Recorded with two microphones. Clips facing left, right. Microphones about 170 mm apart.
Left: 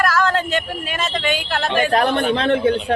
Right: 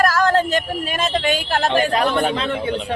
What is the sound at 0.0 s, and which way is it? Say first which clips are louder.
Speech: right 2 dB; 40° right (ahead or behind).